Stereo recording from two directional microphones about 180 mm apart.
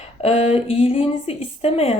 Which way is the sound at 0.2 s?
35° left (ahead or behind).